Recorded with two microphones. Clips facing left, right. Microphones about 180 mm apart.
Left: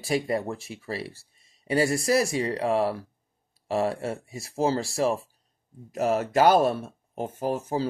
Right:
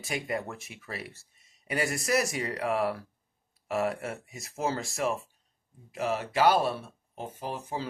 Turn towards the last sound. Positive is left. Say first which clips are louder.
# left 8 dB
turn(degrees=40)  # may be behind; listen again after turning